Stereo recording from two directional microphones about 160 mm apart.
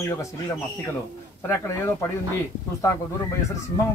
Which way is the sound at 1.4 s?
15° left (ahead or behind).